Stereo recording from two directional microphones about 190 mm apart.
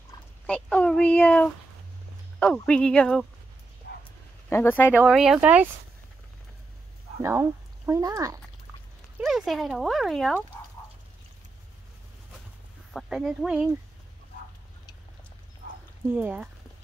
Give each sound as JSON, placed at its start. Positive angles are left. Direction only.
{"t": 0.1, "sound": "fowl", "side_deg": 20}
{"t": 0.5, "sound": "a child's voice", "side_deg": 5}
{"t": 4.5, "sound": "speech", "side_deg": 10}
{"t": 4.9, "sound": "speech", "side_deg": -5}
{"t": 7.2, "sound": "speech", "side_deg": -15}
{"t": 9.2, "sound": "speech", "side_deg": 0}
{"t": 12.9, "sound": "speech", "side_deg": 0}
{"t": 16.2, "sound": "speech", "side_deg": -10}